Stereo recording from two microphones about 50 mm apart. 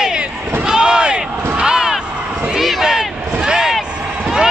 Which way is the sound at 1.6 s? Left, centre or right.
Centre.